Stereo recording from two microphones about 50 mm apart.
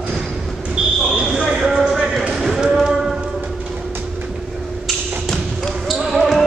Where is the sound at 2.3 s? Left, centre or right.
Centre.